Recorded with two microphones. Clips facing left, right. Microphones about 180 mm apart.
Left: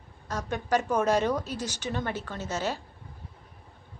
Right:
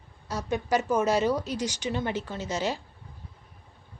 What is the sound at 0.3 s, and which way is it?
Speech, 10° right (ahead or behind).